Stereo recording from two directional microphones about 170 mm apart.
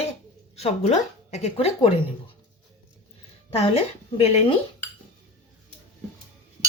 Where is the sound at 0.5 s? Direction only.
40° left (ahead or behind).